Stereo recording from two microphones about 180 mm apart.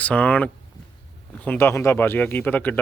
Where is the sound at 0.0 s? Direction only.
5° left (ahead or behind).